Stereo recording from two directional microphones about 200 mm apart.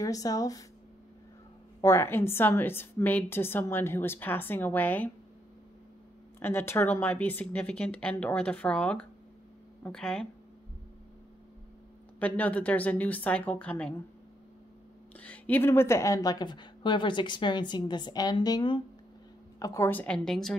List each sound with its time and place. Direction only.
0.0 s a woman's voice: 15° left (ahead or behind)
1.8 s a woman's voice: 15° left (ahead or behind)
6.4 s a woman's voice: 10° left (ahead or behind)
12.2 s a woman's voice: 5° left (ahead or behind)
15.1 s a woman's voice: 5° left (ahead or behind)